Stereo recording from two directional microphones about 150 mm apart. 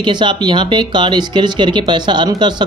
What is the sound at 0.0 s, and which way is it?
Speech, 30° right (ahead or behind).